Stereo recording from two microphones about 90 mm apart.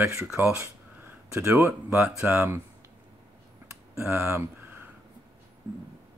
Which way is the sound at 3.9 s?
30° right (ahead or behind).